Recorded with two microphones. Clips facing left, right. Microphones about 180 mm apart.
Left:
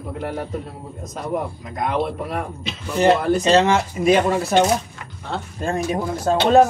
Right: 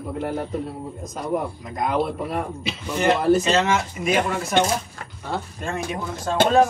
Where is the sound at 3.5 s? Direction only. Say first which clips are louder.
Left 5 dB; 35° left (ahead or behind).